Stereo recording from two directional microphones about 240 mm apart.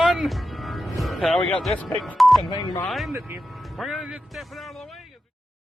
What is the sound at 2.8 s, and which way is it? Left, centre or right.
Speech, centre.